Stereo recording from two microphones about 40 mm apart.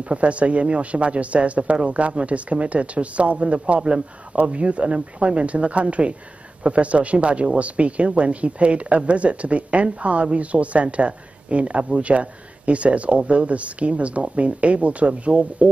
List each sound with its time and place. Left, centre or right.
0.1 s speech: right